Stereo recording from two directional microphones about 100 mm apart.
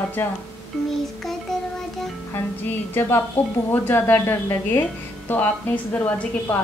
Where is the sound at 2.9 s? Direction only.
20° left (ahead or behind).